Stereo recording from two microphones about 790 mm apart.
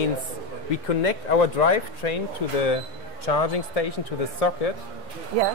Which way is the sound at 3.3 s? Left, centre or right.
Left.